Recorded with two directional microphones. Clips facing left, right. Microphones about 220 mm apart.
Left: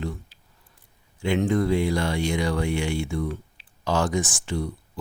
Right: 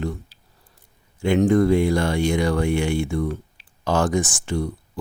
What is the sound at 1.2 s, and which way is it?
Speech, 45° right (ahead or behind).